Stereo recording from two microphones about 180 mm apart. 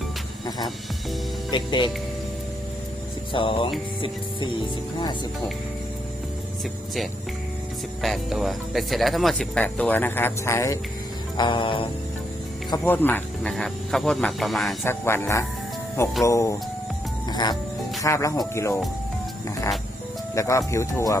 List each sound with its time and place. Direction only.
1.5 s music: 25° left (ahead or behind)
3.3 s music: 30° left (ahead or behind)
8.0 s speech: centre (ahead or behind); by 10.8 s 15° left (ahead or behind)
11.3 s music: 25° left (ahead or behind)
12.7 s speech: 10° left (ahead or behind)
14.8 s speech: 15° left (ahead or behind)
17.2 s music: 25° left (ahead or behind)
18.0 s speech: 15° left (ahead or behind)
20.3 s speech: 15° left (ahead or behind)